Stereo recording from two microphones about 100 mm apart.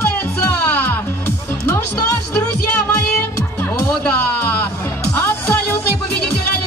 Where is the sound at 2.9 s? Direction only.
20° left (ahead or behind).